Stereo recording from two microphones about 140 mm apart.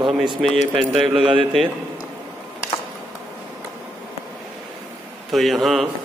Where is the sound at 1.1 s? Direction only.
40° right (ahead or behind).